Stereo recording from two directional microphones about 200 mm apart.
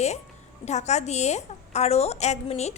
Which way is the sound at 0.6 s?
35° left (ahead or behind).